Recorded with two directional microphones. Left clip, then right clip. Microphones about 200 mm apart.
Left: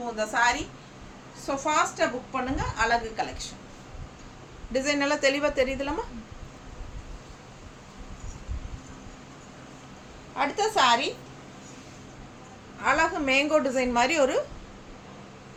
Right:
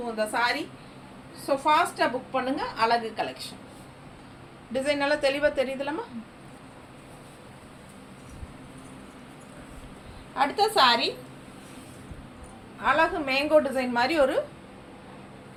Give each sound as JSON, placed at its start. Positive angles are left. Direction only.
{"t": 0.2, "sound": "a woman's voice", "side_deg": 15}
{"t": 1.7, "sound": "a woman's voice", "side_deg": 10}
{"t": 4.7, "sound": "a woman's voice", "side_deg": 25}
{"t": 10.3, "sound": "a woman's voice", "side_deg": 10}
{"t": 12.8, "sound": "a woman's voice", "side_deg": 20}